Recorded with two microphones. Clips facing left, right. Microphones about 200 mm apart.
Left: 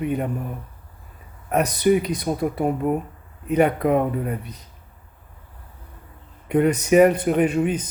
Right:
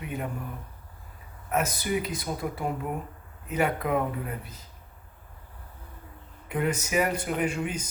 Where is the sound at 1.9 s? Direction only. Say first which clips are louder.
Left 10 dB; 45° left (ahead or behind).